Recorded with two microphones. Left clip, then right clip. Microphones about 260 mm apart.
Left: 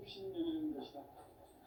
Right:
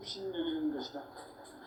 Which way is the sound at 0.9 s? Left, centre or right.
Right.